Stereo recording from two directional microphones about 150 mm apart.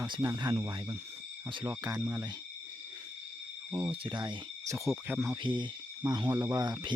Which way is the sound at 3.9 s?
35° right (ahead or behind).